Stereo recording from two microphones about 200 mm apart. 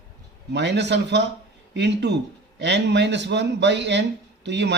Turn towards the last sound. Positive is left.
turn(degrees=-60)  # may be behind; listen again after turning